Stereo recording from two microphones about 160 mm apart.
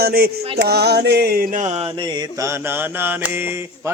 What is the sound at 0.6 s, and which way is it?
Mantra, 90° right.